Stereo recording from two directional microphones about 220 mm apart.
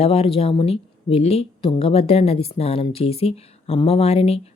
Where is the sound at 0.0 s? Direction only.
25° left (ahead or behind).